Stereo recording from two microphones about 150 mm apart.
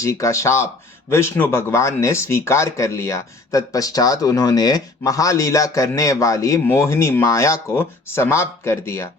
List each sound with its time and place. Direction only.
0.0 s speech: 20° left (ahead or behind)